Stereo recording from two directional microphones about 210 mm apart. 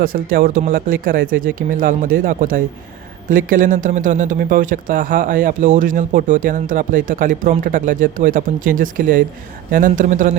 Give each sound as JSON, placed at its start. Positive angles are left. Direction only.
{"t": 0.0, "sound": "speech", "side_deg": -40}